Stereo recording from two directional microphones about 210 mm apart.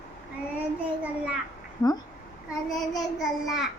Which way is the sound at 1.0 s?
5° right (ahead or behind).